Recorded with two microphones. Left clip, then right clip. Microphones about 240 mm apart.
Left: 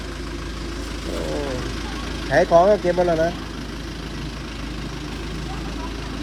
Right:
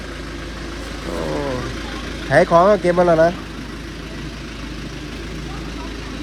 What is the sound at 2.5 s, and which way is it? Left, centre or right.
Speech, right.